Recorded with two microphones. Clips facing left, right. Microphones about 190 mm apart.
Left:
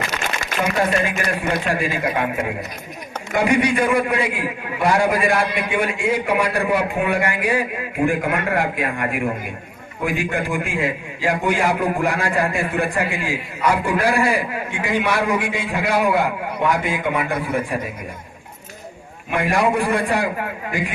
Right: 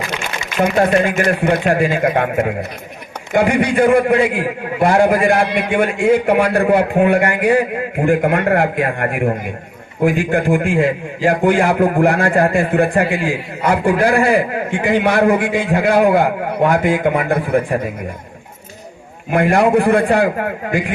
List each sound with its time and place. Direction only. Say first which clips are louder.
0.6 s a man's voice: right 6 dB; 55° right (ahead or behind)
3.8 s a man's voice: right 7 dB; 55° right (ahead or behind)
19.4 s a man's voice: right 6 dB; 55° right (ahead or behind)